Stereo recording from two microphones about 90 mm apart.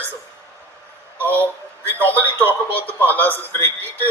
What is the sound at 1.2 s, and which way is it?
Speech, 25° right (ahead or behind).